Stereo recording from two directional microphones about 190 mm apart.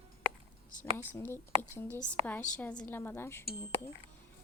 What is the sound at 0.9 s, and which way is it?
A woman's voice, 10° left (ahead or behind).